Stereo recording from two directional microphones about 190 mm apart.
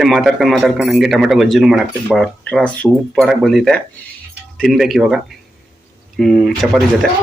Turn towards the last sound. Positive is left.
turn(degrees=0)  # may be behind; listen again after turning